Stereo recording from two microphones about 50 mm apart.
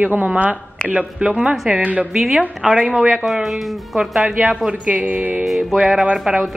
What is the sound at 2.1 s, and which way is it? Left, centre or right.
Speech, centre.